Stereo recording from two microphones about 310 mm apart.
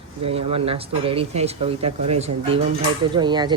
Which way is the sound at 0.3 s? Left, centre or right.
Centre.